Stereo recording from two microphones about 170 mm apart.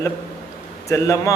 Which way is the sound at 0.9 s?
15° left (ahead or behind).